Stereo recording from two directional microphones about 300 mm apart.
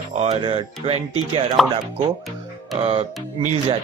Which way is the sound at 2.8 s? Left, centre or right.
Centre.